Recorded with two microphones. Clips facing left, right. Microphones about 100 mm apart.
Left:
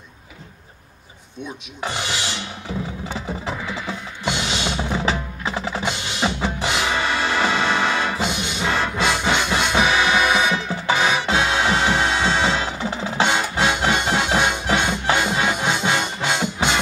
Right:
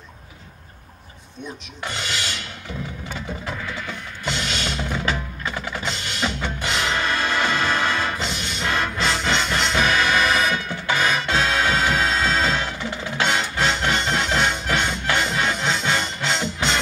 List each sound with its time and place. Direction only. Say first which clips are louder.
1.8 s filing: left 3 dB; 20° left (ahead or behind)
3.1 s music: left 3 dB; 25° left (ahead or behind)
12.2 s music: left 1 dB; 10° left (ahead or behind)
12.7 s percussion: left 4 dB; 30° left (ahead or behind)
13.4 s music: left 2 dB; 15° left (ahead or behind)